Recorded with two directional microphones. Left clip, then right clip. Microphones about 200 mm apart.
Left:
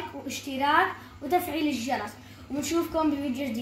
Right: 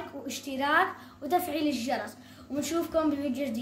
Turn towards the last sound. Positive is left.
turn(degrees=-15)  # may be behind; listen again after turning